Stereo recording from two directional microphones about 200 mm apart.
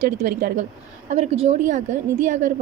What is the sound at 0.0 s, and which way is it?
A woman's voice, 40° right (ahead or behind).